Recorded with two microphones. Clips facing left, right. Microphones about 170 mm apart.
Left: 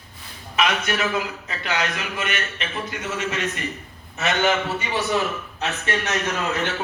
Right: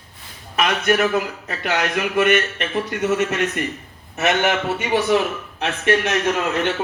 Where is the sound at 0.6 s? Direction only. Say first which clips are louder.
Right 5 dB; 50° right (ahead or behind).